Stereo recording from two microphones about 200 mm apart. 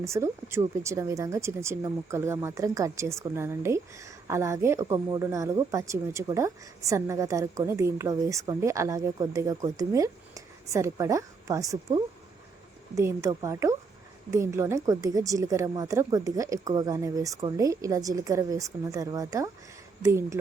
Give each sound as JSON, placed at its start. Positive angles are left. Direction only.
{"t": 0.0, "sound": "speech", "side_deg": -15}